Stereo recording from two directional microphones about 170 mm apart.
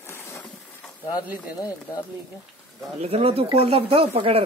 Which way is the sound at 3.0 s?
35° right (ahead or behind).